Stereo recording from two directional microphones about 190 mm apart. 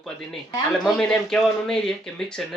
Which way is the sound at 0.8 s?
5° left (ahead or behind).